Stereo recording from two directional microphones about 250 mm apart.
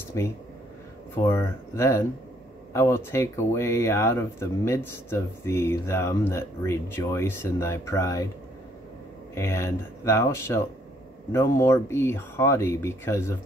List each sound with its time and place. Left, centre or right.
1.1 s speech: centre
9.3 s speech: centre